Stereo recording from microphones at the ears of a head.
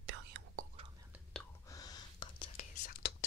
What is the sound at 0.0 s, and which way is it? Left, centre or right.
Whispering, right.